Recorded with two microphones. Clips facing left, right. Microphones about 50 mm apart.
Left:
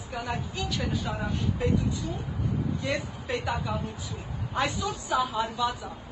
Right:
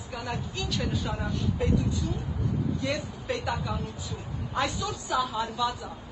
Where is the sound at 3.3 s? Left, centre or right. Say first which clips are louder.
Even; left.